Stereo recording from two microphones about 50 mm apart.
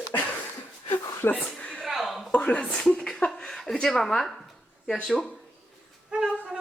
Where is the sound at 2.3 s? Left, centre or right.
Centre.